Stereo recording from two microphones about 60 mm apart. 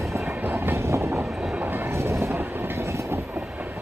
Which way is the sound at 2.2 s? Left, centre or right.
Right.